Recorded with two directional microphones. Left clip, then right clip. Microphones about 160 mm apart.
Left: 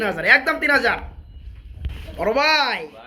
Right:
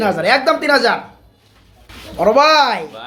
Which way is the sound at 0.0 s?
5° right (ahead or behind).